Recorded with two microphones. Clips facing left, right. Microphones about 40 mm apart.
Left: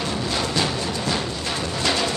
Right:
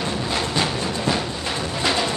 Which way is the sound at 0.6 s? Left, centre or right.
Centre.